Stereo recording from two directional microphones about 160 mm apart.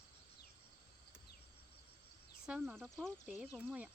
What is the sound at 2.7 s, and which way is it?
Speech, centre (ahead or behind).